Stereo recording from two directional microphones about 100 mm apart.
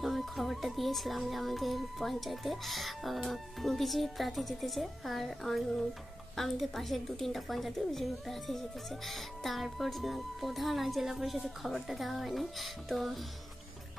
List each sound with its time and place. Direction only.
0.0 s speech: centre (ahead or behind)